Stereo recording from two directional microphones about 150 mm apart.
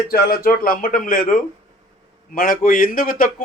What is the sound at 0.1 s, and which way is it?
Speech, 85° left.